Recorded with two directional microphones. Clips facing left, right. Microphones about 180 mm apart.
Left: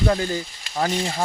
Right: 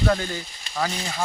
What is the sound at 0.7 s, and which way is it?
Speech, 25° left (ahead or behind).